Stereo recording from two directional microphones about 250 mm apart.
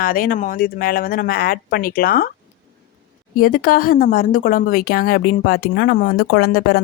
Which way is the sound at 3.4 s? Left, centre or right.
Left.